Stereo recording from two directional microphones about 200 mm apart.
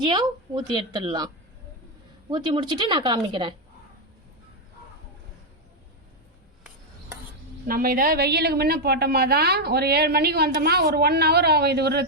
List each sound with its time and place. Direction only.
0.0 s a woman's voice: 20° right (ahead or behind)
2.3 s a woman's voice: 25° right (ahead or behind)
7.7 s a woman's voice: 45° right (ahead or behind)